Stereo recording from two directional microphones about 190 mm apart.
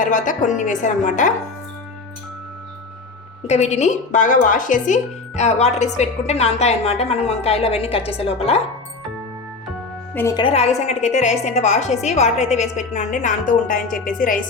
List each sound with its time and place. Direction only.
0.0 s a woman's voice: 40° left (ahead or behind)
3.4 s a woman's voice: 35° left (ahead or behind)
10.2 s a woman's voice: 15° left (ahead or behind)
10.4 s a woman's voice: 35° left (ahead or behind)